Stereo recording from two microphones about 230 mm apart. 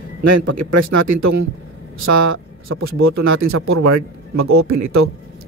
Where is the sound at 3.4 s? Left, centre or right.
Right.